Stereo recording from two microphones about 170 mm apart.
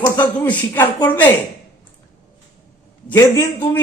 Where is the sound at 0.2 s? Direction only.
10° left (ahead or behind).